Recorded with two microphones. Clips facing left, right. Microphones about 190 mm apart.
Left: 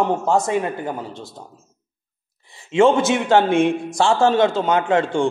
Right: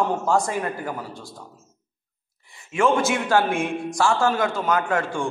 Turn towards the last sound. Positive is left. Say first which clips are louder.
# left 6 dB
turn(degrees=25)  # may be behind; listen again after turning